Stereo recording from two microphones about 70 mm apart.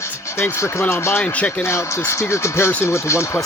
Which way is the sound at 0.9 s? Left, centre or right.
Left.